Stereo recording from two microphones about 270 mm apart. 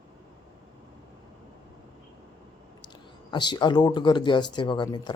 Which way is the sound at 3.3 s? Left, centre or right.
Centre.